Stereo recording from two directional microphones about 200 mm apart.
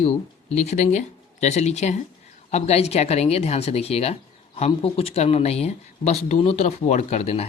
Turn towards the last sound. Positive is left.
turn(degrees=30)  # may be behind; listen again after turning